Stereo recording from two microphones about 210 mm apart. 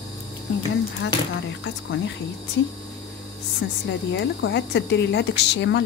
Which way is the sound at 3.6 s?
60° left (ahead or behind).